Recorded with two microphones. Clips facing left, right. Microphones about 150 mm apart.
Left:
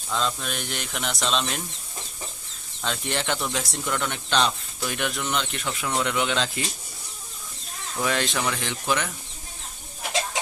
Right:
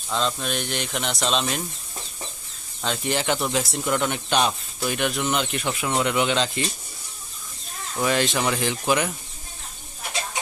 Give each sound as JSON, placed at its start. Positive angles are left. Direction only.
{"t": 0.1, "sound": "speech", "side_deg": 0}
{"t": 2.8, "sound": "speech", "side_deg": -5}
{"t": 8.0, "sound": "speech", "side_deg": 0}